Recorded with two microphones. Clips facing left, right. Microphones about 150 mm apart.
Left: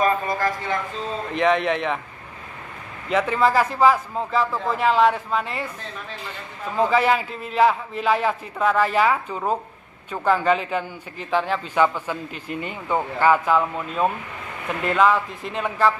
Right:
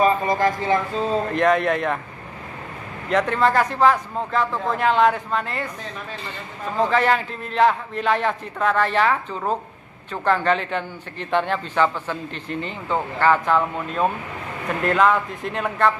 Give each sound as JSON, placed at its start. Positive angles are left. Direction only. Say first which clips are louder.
{"t": 0.0, "sound": "speech", "louder": "right 3 dB", "side_deg": -20}
{"t": 1.3, "sound": "a man's voice", "louder": "left 1 dB", "side_deg": 0}
{"t": 3.1, "sound": "a man's voice", "louder": "even", "side_deg": 5}
{"t": 6.8, "sound": "a man's voice", "louder": "even", "side_deg": 5}